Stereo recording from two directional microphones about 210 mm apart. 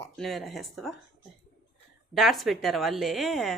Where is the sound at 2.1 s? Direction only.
Centre (ahead or behind).